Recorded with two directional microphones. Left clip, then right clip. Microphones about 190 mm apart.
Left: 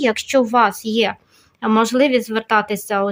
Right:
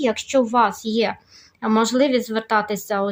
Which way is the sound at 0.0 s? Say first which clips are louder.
Left 3 dB; 40° left (ahead or behind).